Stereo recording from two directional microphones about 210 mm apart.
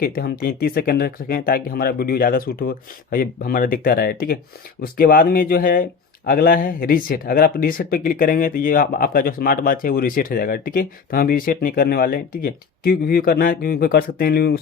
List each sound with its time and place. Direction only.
0.0 s speech: 45° left (ahead or behind)